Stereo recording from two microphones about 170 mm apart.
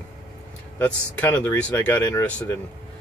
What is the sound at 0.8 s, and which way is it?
Speech, 10° left (ahead or behind).